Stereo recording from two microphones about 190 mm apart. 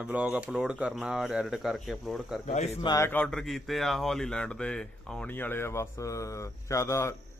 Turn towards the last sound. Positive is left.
turn(degrees=15)  # may be behind; listen again after turning